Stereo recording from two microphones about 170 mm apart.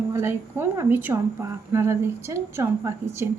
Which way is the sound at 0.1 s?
15° right (ahead or behind).